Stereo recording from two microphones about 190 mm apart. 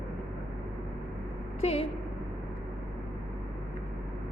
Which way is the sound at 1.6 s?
30° left (ahead or behind).